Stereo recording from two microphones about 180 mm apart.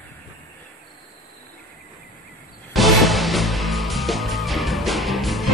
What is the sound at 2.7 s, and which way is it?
Music, centre (ahead or behind).